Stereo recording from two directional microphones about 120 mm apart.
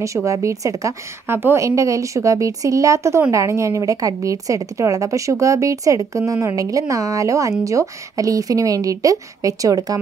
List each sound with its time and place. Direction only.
0.0 s a woman's voice: 25° right (ahead or behind)